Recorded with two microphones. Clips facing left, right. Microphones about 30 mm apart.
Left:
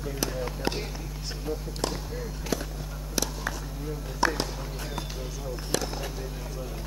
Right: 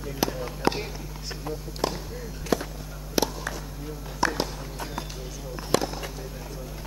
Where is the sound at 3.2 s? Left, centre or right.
Centre.